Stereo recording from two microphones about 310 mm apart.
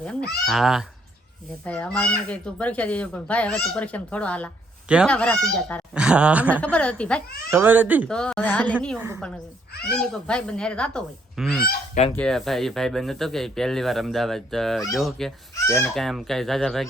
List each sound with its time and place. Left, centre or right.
0.0 s speech: centre
11.6 s goose: left
12.1 s speech: centre